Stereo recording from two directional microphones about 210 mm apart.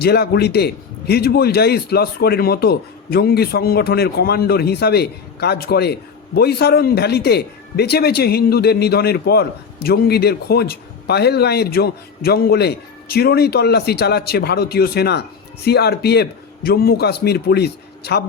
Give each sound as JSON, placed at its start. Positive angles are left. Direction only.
{"t": 0.0, "sound": "a man's voice", "side_deg": 50}